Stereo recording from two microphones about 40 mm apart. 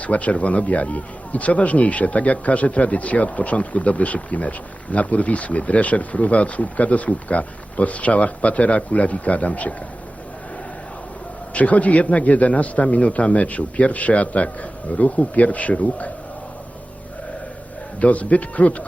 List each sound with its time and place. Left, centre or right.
0.0 s a man's voice: left
11.5 s a man's voice: left
18.0 s a man's voice: left